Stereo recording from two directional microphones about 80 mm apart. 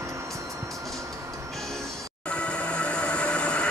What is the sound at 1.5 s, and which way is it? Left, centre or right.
Train, centre.